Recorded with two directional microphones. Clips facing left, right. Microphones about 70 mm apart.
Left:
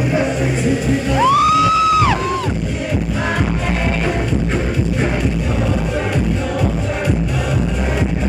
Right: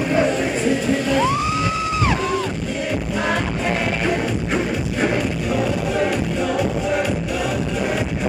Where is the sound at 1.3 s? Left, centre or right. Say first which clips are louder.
Left 8 dB; left.